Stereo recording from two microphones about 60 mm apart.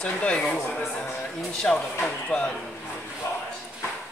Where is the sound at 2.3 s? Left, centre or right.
Centre.